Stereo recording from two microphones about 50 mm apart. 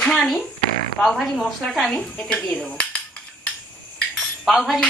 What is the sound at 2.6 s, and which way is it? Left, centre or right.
Cutlery, left.